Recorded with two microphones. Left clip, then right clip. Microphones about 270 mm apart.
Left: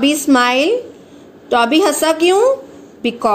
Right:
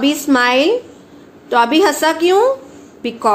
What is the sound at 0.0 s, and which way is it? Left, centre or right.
A woman's voice, centre.